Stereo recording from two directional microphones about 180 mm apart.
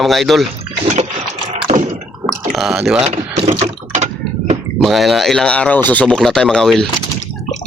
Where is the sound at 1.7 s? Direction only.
40° right (ahead or behind).